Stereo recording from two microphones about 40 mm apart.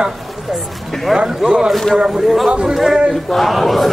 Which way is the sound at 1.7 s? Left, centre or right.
Centre.